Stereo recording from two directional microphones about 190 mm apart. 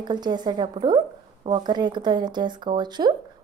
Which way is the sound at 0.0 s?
20° right (ahead or behind).